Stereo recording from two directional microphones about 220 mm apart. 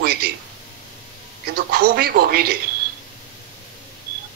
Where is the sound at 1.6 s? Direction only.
45° right (ahead or behind).